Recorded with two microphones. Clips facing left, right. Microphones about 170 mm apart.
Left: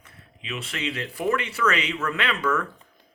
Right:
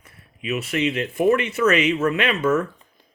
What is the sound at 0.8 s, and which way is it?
Speech, 20° right (ahead or behind).